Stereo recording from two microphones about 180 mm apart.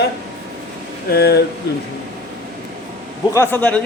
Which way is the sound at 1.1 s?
60° left (ahead or behind).